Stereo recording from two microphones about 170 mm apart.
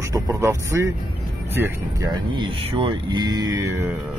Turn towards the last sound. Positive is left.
turn(degrees=-20)  # may be behind; listen again after turning